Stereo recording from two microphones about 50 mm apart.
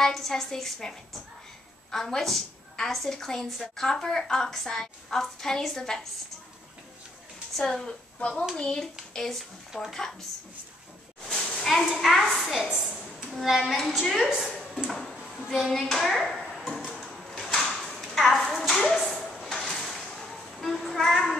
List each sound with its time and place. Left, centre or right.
0.0 s a woman's voice: centre
7.5 s a woman's voice: centre
8.2 s a child's voice: left
9.7 s a child's voice: centre
11.2 s a sound: centre
11.9 s a child's voice: centre
14.4 s a sound: centre
14.9 s a child's voice: centre
17.3 s drawer open or close: centre
18.0 s a sound: centre
18.6 s speech: centre
19.3 s music: centre